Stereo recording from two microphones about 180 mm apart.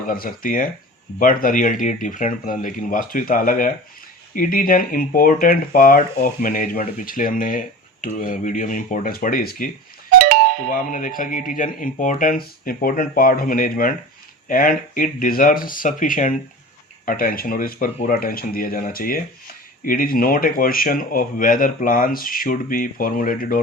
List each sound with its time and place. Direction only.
0.1 s speech: 50° left (ahead or behind)
10.2 s cowbell: 55° right (ahead or behind)
10.7 s speech: 50° left (ahead or behind)